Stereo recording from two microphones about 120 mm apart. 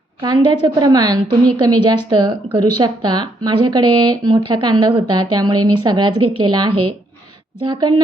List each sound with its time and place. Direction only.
0.2 s speech: 35° right (ahead or behind)